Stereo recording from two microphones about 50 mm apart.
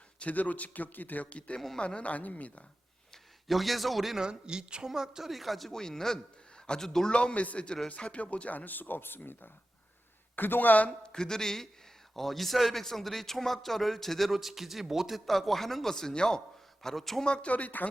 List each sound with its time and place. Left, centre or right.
0.2 s speech: left
3.4 s speech: centre
4.2 s a man's voice: centre
7.1 s speech: left
11.1 s a man's voice: centre
17.2 s speech: left